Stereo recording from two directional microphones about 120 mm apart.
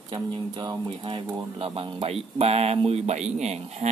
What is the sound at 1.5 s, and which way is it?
Speech, 50° right (ahead or behind).